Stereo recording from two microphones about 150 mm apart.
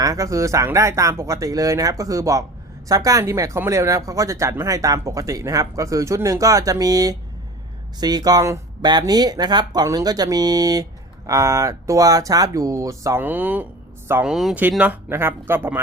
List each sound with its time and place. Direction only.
0.0 s speech: 20° right (ahead or behind)